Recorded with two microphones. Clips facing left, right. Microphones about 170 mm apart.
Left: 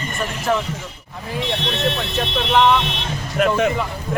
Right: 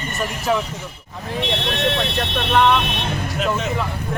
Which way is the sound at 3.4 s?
60° left (ahead or behind).